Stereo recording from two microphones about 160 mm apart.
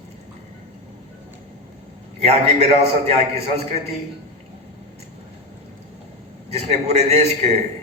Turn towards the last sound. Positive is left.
turn(degrees=-45)  # may be behind; listen again after turning